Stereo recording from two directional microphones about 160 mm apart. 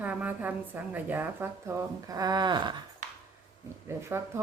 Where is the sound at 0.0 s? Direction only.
10° right (ahead or behind); by 2.8 s 30° right (ahead or behind).